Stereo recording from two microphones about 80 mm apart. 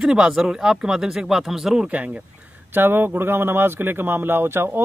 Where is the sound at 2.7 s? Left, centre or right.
Right.